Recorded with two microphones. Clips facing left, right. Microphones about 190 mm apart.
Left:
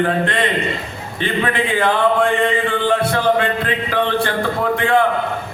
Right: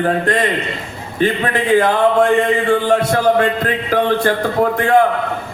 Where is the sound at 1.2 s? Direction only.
40° right (ahead or behind).